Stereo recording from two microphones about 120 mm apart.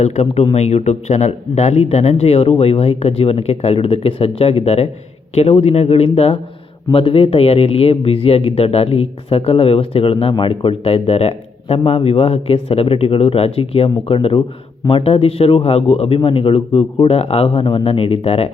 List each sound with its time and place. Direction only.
0.0 s speech: 65° left (ahead or behind)